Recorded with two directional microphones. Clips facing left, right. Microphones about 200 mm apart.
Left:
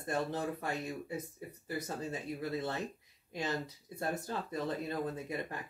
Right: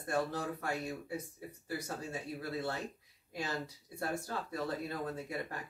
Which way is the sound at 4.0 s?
20° left (ahead or behind).